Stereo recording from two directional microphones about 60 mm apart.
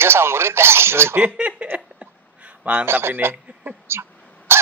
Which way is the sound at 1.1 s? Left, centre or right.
Right.